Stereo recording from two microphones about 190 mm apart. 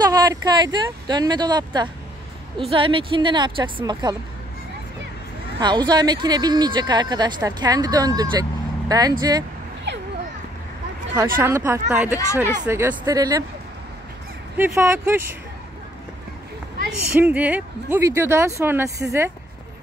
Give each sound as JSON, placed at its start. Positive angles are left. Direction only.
{"t": 0.0, "sound": "speech", "side_deg": -20}
{"t": 5.6, "sound": "speech", "side_deg": -25}
{"t": 11.3, "sound": "speech", "side_deg": -10}
{"t": 14.6, "sound": "speech", "side_deg": -15}
{"t": 17.2, "sound": "speech", "side_deg": -10}